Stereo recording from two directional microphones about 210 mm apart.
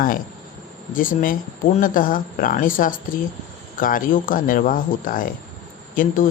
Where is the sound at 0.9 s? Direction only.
40° left (ahead or behind).